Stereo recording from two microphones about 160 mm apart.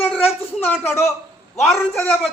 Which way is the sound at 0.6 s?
10° left (ahead or behind).